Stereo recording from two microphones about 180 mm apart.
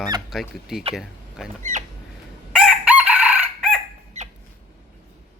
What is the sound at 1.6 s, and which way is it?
Rodents, 45° right (ahead or behind).